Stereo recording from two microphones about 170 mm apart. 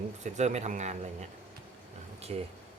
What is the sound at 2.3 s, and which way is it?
Speech, 40° right (ahead or behind).